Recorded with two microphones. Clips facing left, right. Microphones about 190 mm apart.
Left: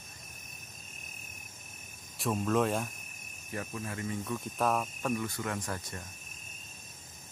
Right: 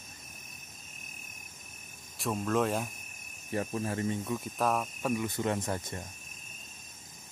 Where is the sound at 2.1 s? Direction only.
Centre (ahead or behind).